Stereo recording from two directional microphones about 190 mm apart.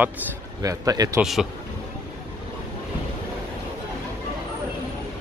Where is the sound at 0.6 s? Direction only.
20° right (ahead or behind).